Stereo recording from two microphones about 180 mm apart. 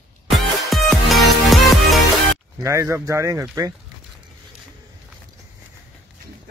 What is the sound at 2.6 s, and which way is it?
Speech, 15° right (ahead or behind).